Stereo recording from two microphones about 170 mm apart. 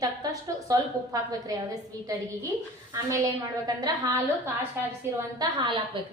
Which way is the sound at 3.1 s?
20° right (ahead or behind).